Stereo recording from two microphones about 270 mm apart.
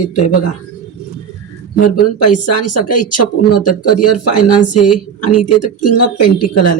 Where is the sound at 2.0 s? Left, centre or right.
Left.